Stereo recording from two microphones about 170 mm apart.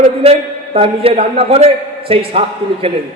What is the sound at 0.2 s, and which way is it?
A man's voice, 35° right (ahead or behind).